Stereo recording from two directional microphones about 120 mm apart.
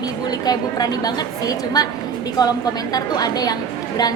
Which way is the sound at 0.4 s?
35° left (ahead or behind).